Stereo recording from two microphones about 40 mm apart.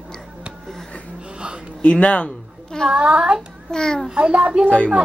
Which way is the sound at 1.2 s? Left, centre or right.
Right.